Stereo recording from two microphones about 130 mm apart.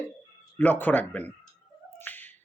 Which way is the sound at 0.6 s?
15° left (ahead or behind).